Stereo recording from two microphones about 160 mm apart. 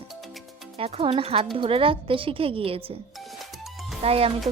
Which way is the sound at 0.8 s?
35° right (ahead or behind).